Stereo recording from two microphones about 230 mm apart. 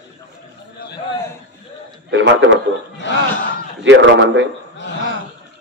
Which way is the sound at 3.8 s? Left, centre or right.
Right.